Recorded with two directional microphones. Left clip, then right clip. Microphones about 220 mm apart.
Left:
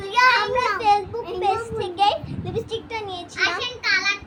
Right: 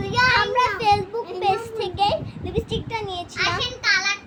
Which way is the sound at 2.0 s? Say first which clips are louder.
Left 2 dB; centre (ahead or behind).